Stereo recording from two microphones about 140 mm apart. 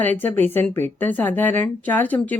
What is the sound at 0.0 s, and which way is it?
Speech, 10° left (ahead or behind).